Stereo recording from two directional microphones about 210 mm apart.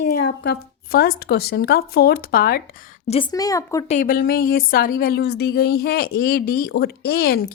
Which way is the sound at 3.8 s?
35° left (ahead or behind).